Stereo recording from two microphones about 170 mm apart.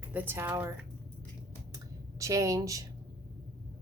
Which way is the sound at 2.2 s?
20° right (ahead or behind).